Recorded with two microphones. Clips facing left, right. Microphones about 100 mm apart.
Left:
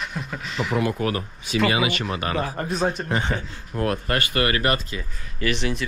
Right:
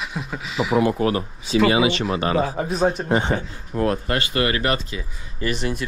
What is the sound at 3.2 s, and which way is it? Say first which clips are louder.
Speech: right 4 dB; 25° right (ahead or behind).